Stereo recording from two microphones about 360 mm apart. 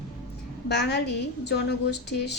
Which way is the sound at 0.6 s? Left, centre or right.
Left.